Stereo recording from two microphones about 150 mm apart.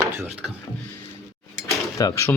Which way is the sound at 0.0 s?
20° right (ahead or behind).